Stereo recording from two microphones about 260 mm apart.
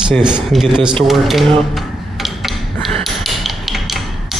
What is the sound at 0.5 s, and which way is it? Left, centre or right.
Speech, centre.